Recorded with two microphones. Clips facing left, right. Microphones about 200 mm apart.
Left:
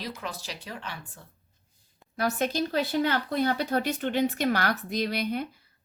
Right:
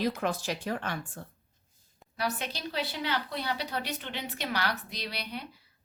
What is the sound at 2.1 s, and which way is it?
Speech, 45° left (ahead or behind).